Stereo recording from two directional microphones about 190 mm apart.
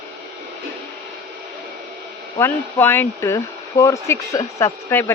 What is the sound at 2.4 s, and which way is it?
Speech, 10° left (ahead or behind).